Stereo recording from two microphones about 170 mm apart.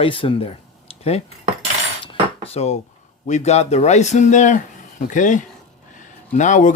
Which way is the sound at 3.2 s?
40° left (ahead or behind).